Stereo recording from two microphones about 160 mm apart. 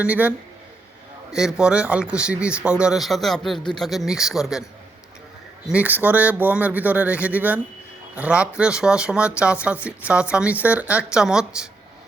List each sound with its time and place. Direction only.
0.0 s speech: 10° right (ahead or behind)
5.6 s speech: 10° right (ahead or behind)